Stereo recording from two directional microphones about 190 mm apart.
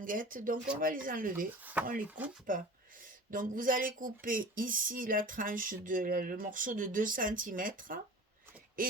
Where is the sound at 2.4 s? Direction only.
45° right (ahead or behind).